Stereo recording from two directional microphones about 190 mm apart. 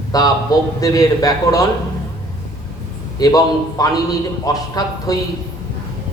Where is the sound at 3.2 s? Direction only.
20° left (ahead or behind).